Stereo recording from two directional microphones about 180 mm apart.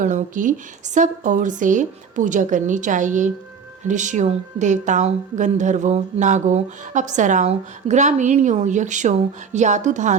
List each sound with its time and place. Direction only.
0.0 s a woman's voice: 45° right (ahead or behind)